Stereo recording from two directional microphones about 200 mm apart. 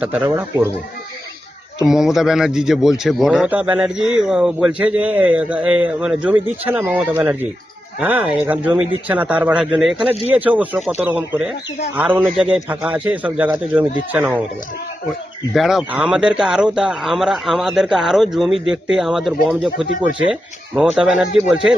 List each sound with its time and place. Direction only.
0.0 s a man's voice: 10° right (ahead or behind)
1.9 s a man's voice: centre (ahead or behind)
15.5 s speech: centre (ahead or behind)
20.7 s speech: 5° right (ahead or behind)